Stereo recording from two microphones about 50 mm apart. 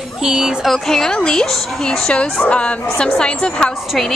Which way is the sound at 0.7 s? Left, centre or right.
Centre.